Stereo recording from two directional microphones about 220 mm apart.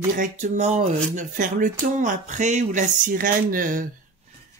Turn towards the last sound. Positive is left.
turn(degrees=-40)  # may be behind; listen again after turning